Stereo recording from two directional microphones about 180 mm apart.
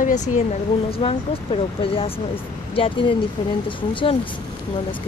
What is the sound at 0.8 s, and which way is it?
Speech, 30° left (ahead or behind).